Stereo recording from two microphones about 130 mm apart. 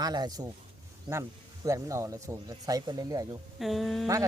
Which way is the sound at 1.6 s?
25° right (ahead or behind).